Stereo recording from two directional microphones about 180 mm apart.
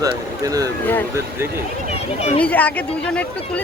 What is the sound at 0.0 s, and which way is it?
Speech, 20° right (ahead or behind).